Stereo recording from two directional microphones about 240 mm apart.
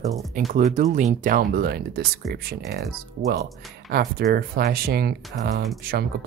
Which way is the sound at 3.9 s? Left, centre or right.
Right.